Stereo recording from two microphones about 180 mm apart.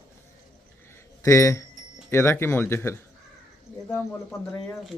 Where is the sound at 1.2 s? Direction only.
15° left (ahead or behind).